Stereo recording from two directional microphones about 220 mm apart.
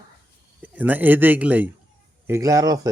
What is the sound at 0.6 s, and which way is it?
Speech, 5° right (ahead or behind).